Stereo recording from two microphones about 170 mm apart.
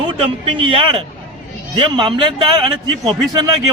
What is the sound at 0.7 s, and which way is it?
A man's voice, 30° right (ahead or behind).